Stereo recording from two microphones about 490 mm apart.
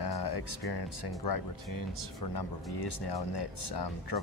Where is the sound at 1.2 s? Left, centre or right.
Left.